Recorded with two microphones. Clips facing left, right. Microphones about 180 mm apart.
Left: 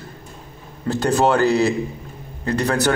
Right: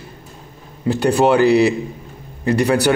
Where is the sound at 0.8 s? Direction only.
15° right (ahead or behind).